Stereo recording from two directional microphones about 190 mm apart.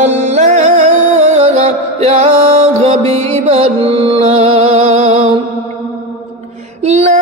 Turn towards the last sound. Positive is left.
turn(degrees=-35)  # may be behind; listen again after turning